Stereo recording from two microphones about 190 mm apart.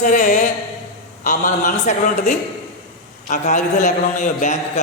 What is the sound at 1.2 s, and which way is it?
A man's voice, 40° left (ahead or behind).